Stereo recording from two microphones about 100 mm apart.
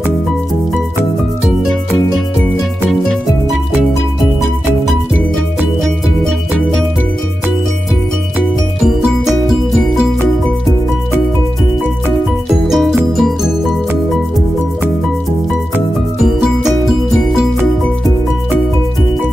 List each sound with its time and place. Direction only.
6.2 s music: centre (ahead or behind)
12.4 s music: centre (ahead or behind)